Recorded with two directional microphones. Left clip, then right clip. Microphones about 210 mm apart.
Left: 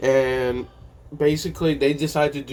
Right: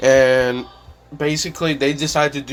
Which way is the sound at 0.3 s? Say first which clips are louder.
Right 8 dB; 60° right (ahead or behind).